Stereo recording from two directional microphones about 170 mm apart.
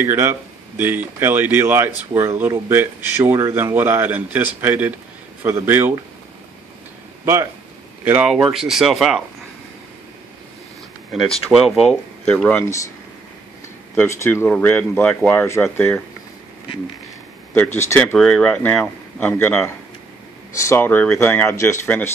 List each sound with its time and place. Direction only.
0.0 s speech: 15° right (ahead or behind)
8.0 s speech: 10° right (ahead or behind)
11.7 s speech: centre (ahead or behind)
13.9 s speech: 15° left (ahead or behind)
17.6 s speech: 15° left (ahead or behind)